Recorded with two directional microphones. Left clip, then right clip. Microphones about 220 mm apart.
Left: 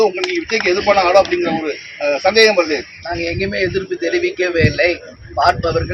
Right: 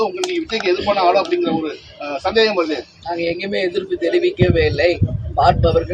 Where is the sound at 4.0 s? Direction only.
10° right (ahead or behind).